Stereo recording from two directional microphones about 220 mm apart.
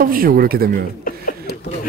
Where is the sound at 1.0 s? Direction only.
40° left (ahead or behind).